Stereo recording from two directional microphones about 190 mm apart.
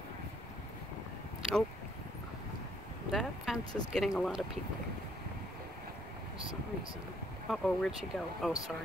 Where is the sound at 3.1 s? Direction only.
Centre (ahead or behind).